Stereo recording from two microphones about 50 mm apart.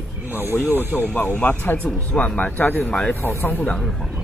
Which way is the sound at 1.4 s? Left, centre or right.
Left.